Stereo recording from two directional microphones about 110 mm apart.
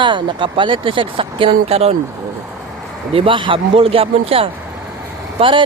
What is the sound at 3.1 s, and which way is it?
Speech, 50° right (ahead or behind).